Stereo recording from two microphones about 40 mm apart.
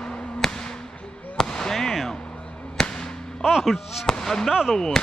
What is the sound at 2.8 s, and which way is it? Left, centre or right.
Whip, centre.